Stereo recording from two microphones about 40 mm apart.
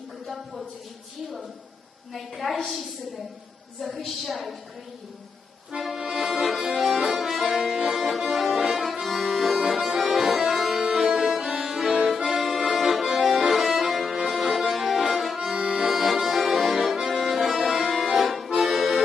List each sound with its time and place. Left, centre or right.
2.1 s a woman's voice: centre
3.8 s a woman's voice: centre
6.0 s accordion: centre
6.2 s accordion: centre
8.7 s accordion: centre
10.9 s music: centre
11.5 s accordion: centre
15.5 s accordion: right
15.8 s accordion: centre